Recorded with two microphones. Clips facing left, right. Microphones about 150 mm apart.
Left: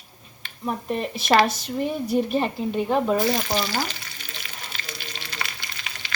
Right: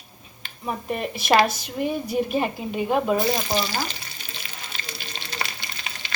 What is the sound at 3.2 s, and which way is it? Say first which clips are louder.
Speech: even; 20° right (ahead or behind).